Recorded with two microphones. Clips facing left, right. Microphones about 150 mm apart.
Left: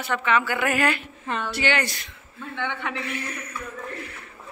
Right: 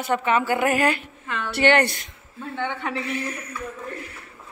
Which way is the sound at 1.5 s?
60° right (ahead or behind).